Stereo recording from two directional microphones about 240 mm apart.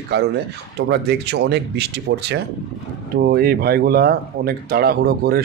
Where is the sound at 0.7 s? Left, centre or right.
Right.